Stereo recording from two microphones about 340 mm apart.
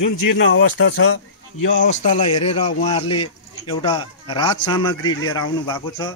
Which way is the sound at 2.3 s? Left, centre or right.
Left.